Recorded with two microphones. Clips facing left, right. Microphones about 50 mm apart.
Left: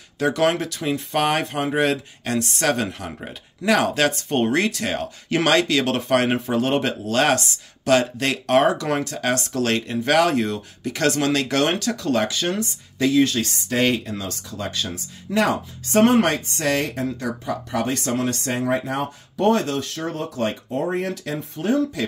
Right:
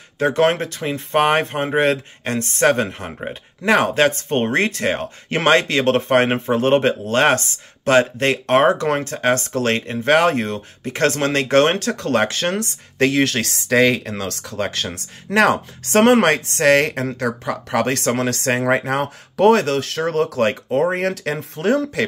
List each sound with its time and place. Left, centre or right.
0.2 s speech: right